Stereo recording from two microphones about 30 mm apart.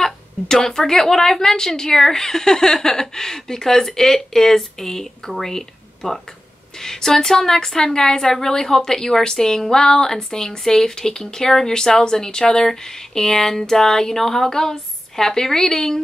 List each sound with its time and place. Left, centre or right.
0.0 s a woman's voice: centre